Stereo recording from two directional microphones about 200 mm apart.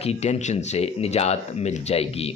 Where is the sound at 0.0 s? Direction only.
30° left (ahead or behind).